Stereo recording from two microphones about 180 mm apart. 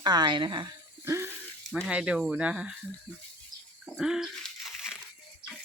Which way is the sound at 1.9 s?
5° right (ahead or behind).